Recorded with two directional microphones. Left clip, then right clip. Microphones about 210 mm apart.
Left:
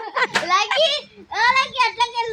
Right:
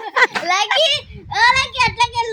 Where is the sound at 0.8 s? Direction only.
55° right (ahead or behind).